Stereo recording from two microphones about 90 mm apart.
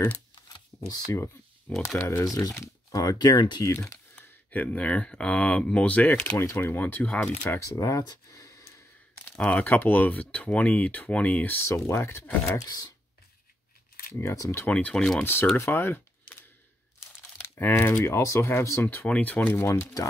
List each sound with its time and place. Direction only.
0.8 s speech: 35° left (ahead or behind)
2.0 s speech: 25° left (ahead or behind)
2.2 s speech: 45° left (ahead or behind)
4.2 s speech: 15° left (ahead or behind)
6.3 s speech: 30° left (ahead or behind)
7.6 s speech: 40° left (ahead or behind)
9.3 s speech: 15° left (ahead or behind)
12.5 s speech: 45° left (ahead or behind)
14.1 s speech: 35° left (ahead or behind)
14.7 s speech: 15° left (ahead or behind)
15.5 s a sound: 30° left (ahead or behind)
17.4 s speech: 25° left (ahead or behind)